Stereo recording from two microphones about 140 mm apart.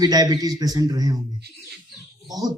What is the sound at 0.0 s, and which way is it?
Speech, 25° right (ahead or behind).